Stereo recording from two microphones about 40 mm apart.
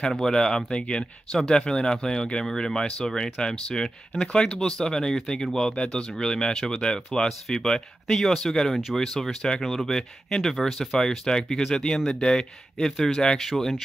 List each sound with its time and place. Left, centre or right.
0.1 s speech: centre
0.7 s speech: left; by 13.7 s centre